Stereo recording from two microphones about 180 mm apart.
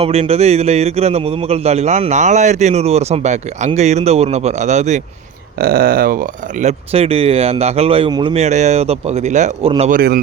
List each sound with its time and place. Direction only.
0.0 s speech: 35° right (ahead or behind)
5.5 s speech: 55° right (ahead or behind); by 9.9 s 35° right (ahead or behind)
9.9 s a man's voice: 60° right (ahead or behind)